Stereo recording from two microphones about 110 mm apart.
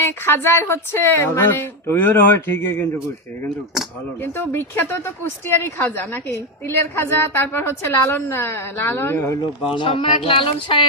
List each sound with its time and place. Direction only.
0.0 s a woman's voice: 20° left (ahead or behind)
4.2 s a woman's voice: 20° left (ahead or behind)
9.7 s speech: 50° left (ahead or behind)